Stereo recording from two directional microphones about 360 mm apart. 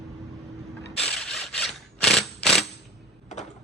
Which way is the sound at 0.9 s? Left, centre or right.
Centre.